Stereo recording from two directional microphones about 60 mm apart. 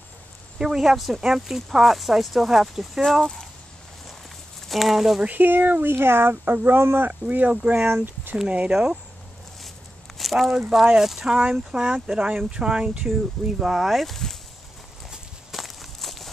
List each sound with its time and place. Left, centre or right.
0.6 s speech: centre
4.6 s speech: centre
5.2 s speech: right
7.1 s speech: right
7.8 s speech: right
8.5 s speech: centre
10.1 s a sound: centre
10.7 s speech: centre
15.0 s walk: centre